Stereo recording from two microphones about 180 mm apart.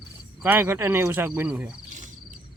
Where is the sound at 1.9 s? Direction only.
40° right (ahead or behind).